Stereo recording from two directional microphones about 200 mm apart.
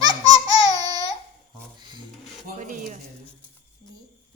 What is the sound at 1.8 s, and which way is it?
Speech, 20° right (ahead or behind).